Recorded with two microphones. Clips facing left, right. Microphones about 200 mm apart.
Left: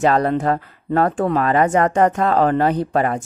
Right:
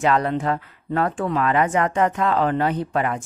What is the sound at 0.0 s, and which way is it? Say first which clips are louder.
Speech: left 4 dB; 40° left (ahead or behind).